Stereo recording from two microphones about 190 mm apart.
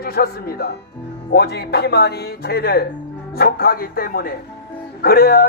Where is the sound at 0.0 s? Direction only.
50° left (ahead or behind).